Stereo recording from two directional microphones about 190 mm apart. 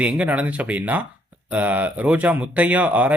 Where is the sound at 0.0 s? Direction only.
5° right (ahead or behind).